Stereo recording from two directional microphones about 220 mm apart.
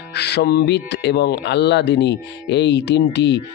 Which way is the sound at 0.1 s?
50° left (ahead or behind).